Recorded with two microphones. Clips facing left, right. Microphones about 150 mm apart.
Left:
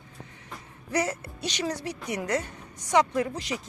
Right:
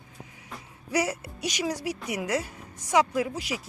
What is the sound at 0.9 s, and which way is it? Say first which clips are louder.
Speech: right 1 dB; 10° right (ahead or behind).